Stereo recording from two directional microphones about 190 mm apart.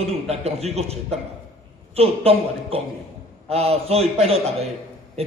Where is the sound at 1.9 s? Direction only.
30° right (ahead or behind).